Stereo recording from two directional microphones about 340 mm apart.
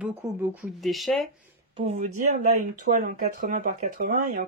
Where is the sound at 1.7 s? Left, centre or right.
Centre.